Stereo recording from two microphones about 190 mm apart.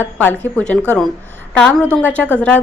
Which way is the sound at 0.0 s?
10° left (ahead or behind).